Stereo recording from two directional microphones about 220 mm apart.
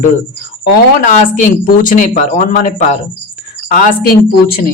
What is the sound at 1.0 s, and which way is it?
Speech, 35° left (ahead or behind).